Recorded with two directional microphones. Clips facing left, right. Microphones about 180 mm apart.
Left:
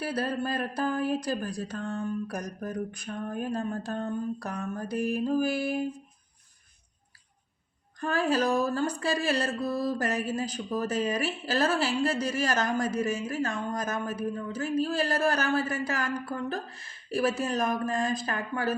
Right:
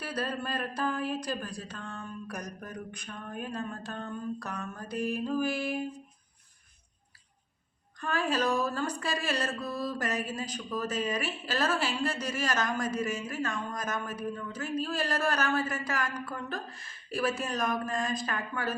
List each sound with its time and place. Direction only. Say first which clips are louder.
0.0 s speech: left 4 dB; 30° left (ahead or behind)
7.9 s speech: left 4 dB; 35° left (ahead or behind)